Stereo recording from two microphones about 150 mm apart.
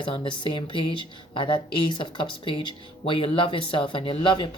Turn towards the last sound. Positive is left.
turn(degrees=35)  # may be behind; listen again after turning